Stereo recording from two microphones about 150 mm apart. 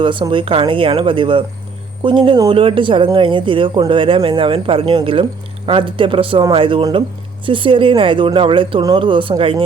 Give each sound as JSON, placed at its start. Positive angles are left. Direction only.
{"t": 0.0, "sound": "speech", "side_deg": -35}